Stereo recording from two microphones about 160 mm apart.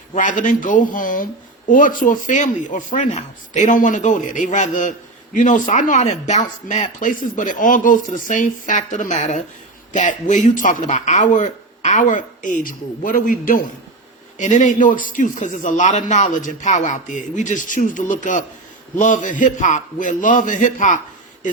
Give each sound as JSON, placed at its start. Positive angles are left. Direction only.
{"t": 0.1, "sound": "a man's voice", "side_deg": 50}
{"t": 14.3, "sound": "speech", "side_deg": 50}